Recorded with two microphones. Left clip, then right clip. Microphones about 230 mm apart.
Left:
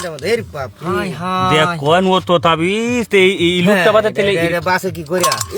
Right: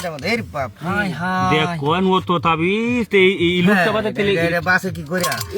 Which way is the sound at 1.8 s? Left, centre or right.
Left.